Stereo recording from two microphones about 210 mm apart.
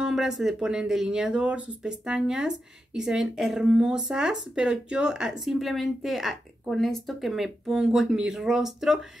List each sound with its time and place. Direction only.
0.0 s speech: centre (ahead or behind)